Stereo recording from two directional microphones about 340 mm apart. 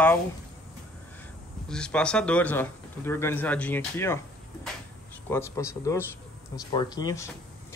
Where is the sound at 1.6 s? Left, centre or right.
Centre.